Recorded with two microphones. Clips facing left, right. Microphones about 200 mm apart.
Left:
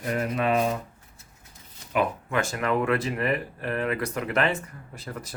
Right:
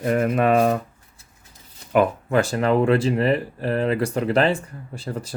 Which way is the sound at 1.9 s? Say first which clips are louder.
Right 7 dB; 50° right (ahead or behind).